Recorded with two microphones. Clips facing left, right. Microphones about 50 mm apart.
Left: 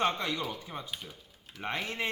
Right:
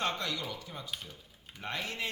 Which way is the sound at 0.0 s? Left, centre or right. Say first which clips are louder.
Left 4 dB; left.